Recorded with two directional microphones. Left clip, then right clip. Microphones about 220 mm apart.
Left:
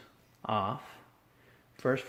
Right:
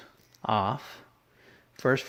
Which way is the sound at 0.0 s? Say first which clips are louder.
Right 7 dB; 50° right (ahead or behind).